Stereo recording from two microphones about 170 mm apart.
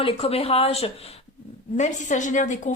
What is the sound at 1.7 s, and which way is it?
Speech, 45° left (ahead or behind).